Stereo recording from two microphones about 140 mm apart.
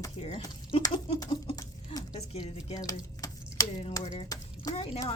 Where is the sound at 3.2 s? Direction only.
25° left (ahead or behind).